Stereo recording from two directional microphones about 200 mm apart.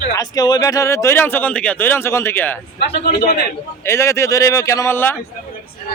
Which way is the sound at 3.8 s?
15° left (ahead or behind).